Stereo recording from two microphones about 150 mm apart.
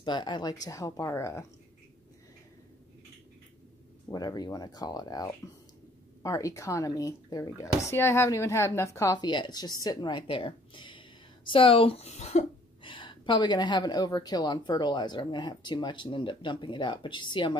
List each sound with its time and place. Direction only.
0.0 s speech: 30° left (ahead or behind)
4.1 s a woman's voice: 25° left (ahead or behind); by 12.4 s 50° left (ahead or behind)
12.8 s a woman's voice: 35° left (ahead or behind)